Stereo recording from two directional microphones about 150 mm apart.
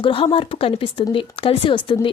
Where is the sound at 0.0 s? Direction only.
35° left (ahead or behind).